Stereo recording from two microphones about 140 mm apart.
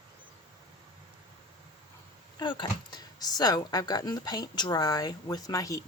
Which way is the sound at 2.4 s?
35° left (ahead or behind).